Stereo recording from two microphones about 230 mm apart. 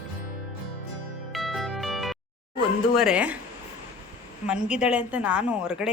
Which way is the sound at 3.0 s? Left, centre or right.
Centre.